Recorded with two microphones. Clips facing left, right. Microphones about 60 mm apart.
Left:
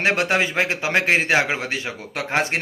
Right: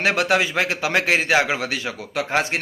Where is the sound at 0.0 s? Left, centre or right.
Left.